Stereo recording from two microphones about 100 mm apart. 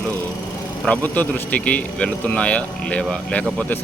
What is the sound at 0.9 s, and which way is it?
A man's voice, 15° left (ahead or behind).